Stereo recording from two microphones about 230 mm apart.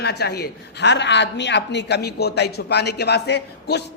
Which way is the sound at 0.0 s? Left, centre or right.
Left.